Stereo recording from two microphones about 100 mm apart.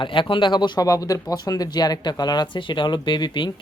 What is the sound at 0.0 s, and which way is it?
Speech, 55° left (ahead or behind).